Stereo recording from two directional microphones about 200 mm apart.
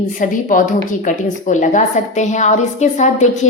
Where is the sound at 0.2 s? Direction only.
40° left (ahead or behind).